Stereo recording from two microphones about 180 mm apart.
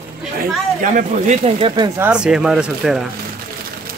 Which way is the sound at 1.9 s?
10° right (ahead or behind).